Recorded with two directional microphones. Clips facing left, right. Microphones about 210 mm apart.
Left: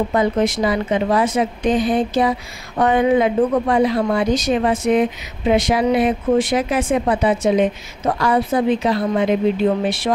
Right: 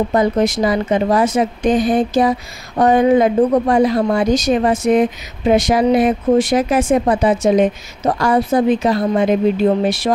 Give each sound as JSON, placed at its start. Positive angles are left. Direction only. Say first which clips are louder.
{"t": 0.1, "sound": "speech", "louder": "right 2 dB", "side_deg": -40}